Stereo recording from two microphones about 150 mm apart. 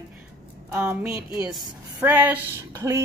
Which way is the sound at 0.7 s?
15° right (ahead or behind).